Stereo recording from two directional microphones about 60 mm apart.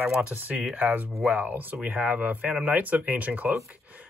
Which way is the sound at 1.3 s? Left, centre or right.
Right.